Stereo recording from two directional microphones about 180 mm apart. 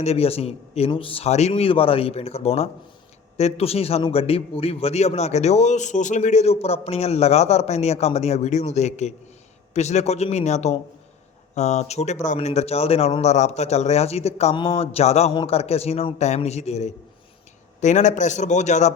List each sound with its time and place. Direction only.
0.0 s a man's voice: 35° left (ahead or behind)